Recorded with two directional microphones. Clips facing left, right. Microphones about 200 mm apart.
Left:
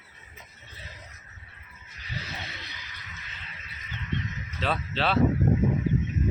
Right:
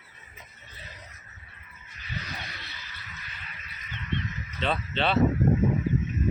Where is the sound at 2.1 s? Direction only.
25° left (ahead or behind).